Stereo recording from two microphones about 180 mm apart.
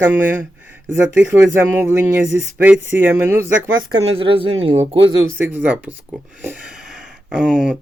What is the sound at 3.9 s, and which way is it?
A woman's voice, 30° right (ahead or behind).